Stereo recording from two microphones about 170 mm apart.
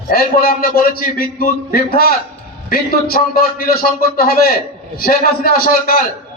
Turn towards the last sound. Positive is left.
turn(degrees=60)  # may be behind; listen again after turning